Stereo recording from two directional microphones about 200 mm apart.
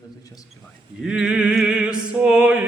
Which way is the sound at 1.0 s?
5° right (ahead or behind).